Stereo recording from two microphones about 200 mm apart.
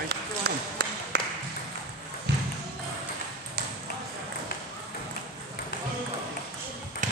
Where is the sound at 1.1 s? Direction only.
50° right (ahead or behind).